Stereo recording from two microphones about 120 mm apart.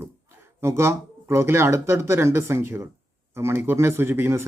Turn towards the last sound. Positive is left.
turn(degrees=-20)  # may be behind; listen again after turning